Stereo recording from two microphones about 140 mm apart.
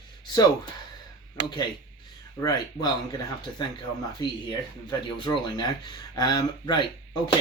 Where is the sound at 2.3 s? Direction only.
30° left (ahead or behind).